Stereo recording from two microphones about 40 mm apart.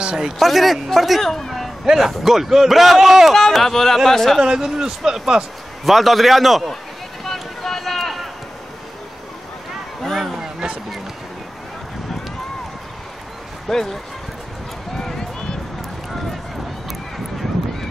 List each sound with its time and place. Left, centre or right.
0.0 s a man's voice: right
0.4 s a man's voice: centre
1.9 s speech: centre
3.5 s speech: centre
4.4 s speech: centre
5.9 s a man's voice: centre
7.6 s run: centre
10.1 s a sound: centre
10.4 s a sound: right
13.7 s speech: centre